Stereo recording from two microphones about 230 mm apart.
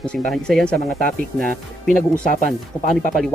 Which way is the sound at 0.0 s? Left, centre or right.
Centre.